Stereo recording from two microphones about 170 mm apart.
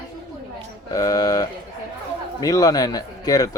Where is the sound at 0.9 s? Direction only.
20° left (ahead or behind).